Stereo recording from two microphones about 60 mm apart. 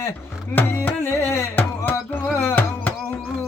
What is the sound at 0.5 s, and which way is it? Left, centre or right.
Music, left.